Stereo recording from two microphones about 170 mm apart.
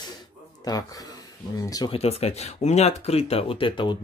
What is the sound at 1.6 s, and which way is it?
Speech, 20° left (ahead or behind).